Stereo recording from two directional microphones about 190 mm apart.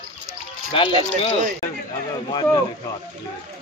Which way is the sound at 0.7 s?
30° left (ahead or behind).